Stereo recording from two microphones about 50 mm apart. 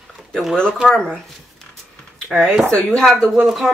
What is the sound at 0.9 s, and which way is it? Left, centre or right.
Speech, centre.